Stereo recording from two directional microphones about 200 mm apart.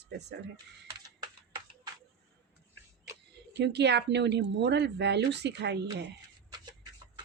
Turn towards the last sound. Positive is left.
turn(degrees=-60)  # may be behind; listen again after turning